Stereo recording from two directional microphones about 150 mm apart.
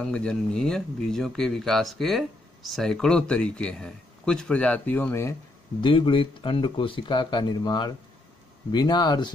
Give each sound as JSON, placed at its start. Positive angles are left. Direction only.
{"t": 0.0, "sound": "speech", "side_deg": 5}
{"t": 5.8, "sound": "speech", "side_deg": 35}